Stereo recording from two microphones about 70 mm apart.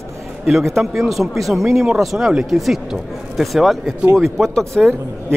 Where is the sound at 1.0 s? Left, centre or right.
Centre.